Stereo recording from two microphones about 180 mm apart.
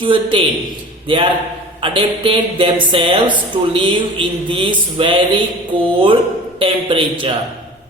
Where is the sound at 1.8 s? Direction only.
30° right (ahead or behind).